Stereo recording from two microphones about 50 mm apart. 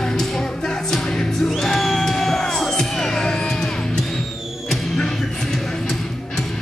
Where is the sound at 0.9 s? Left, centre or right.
Centre.